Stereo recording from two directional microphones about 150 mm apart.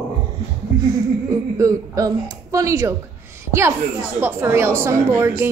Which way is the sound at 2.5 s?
20° right (ahead or behind).